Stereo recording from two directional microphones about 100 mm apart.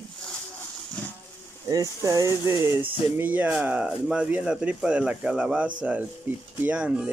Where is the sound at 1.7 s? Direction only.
35° right (ahead or behind).